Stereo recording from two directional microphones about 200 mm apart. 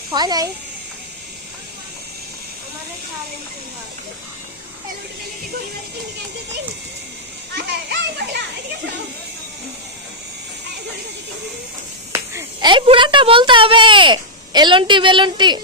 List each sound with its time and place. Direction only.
0.1 s speech: 20° right (ahead or behind)
7.5 s a child's voice: 55° right (ahead or behind)
12.1 s a sound: 15° right (ahead or behind)
12.7 s speech: 25° right (ahead or behind)